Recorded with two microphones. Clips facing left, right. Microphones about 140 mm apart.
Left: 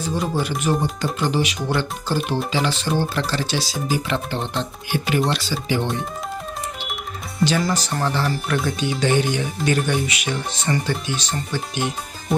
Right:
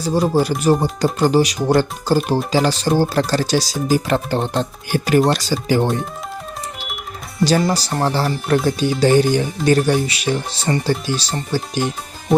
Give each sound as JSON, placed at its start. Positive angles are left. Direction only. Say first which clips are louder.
{"t": 0.0, "sound": "speech", "louder": "right 7 dB", "side_deg": -35}
{"t": 7.6, "sound": "speech", "louder": "right 4 dB", "side_deg": -35}